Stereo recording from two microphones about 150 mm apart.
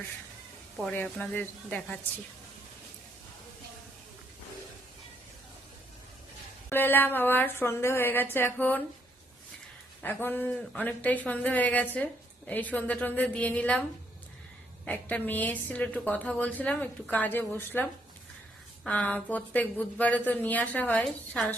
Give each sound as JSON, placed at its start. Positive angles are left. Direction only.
{"t": 0.8, "sound": "a woman's voice", "side_deg": 5}
{"t": 6.7, "sound": "a woman's voice", "side_deg": 15}
{"t": 10.0, "sound": "a woman's voice", "side_deg": 15}
{"t": 14.8, "sound": "a woman's voice", "side_deg": 10}
{"t": 18.9, "sound": "a woman's voice", "side_deg": 10}